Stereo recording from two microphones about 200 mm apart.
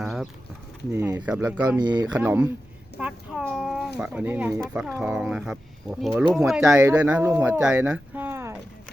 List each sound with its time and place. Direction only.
0.0 s a sound: centre (ahead or behind)
0.9 s speech: 10° right (ahead or behind)
1.8 s speech: 20° right (ahead or behind)
2.1 s speech: 10° right (ahead or behind)